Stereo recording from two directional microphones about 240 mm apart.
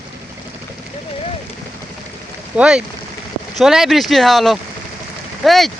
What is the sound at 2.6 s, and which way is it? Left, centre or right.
Speech, centre.